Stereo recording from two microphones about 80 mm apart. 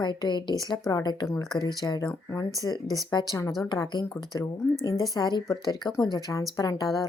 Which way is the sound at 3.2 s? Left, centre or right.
Left.